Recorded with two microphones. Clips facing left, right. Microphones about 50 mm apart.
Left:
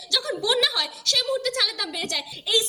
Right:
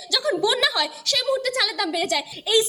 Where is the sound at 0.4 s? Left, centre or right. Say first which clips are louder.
Right 2 dB; centre.